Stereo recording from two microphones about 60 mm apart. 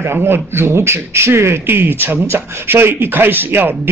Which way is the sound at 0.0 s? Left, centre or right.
Right.